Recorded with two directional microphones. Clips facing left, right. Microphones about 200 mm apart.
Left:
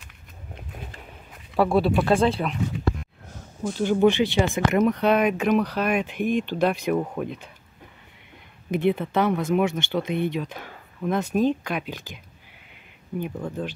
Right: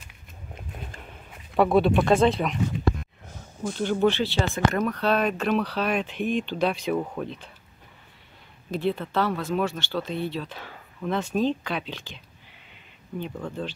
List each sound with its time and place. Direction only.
1.6 s speech: centre (ahead or behind)
3.6 s speech: 10° left (ahead or behind)
8.6 s speech: 15° left (ahead or behind)
13.2 s speech: 10° left (ahead or behind)